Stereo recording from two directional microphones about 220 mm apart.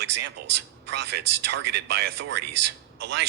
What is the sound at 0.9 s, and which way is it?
Speech, 50° right (ahead or behind).